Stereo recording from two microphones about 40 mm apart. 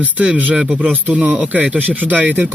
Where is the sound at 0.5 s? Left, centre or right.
Right.